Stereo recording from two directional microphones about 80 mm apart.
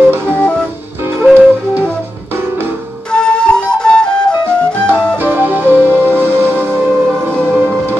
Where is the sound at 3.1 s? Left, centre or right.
Centre.